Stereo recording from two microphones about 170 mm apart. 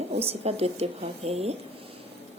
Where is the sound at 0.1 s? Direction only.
35° right (ahead or behind).